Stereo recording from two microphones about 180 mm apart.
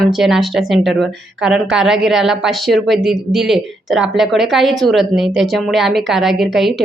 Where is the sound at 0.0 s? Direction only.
Centre (ahead or behind).